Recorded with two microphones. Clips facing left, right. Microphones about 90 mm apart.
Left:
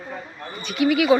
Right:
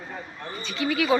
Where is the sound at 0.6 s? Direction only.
15° left (ahead or behind).